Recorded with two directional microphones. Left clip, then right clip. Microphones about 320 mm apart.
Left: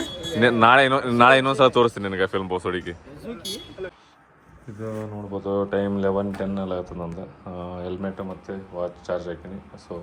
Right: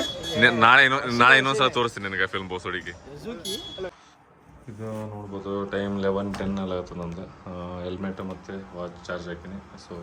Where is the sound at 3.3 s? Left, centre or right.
Centre.